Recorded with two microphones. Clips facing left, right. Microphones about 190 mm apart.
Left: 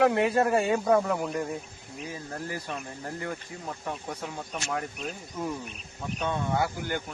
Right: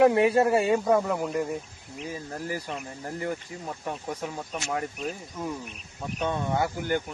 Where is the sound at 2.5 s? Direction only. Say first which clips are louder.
Right 4 dB; 20° right (ahead or behind).